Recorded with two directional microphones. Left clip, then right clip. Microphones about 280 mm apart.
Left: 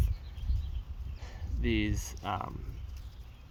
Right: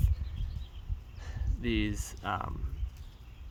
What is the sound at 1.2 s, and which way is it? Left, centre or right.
Speech, centre.